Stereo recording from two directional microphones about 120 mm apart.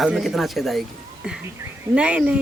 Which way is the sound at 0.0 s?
Centre (ahead or behind).